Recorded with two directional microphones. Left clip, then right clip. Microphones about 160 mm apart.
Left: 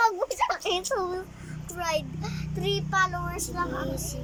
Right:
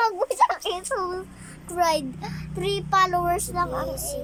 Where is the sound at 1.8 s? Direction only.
35° right (ahead or behind).